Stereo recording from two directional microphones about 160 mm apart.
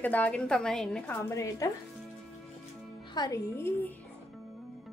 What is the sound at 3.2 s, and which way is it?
Speech, 25° left (ahead or behind).